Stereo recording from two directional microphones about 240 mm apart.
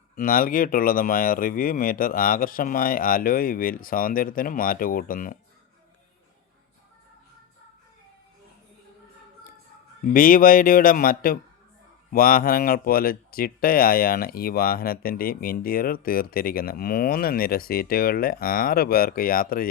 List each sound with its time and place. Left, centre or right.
0.2 s speech: left
10.1 s speech: left